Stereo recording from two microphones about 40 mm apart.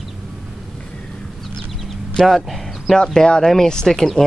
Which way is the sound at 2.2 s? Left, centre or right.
Centre.